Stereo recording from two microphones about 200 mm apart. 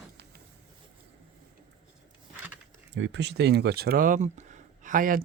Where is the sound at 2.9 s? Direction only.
65° right (ahead or behind); by 5.2 s 45° right (ahead or behind).